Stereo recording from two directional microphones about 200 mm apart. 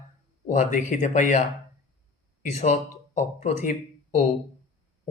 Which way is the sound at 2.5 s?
35° left (ahead or behind).